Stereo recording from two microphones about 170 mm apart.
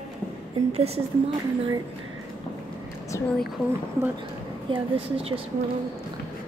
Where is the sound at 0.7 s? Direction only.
35° right (ahead or behind).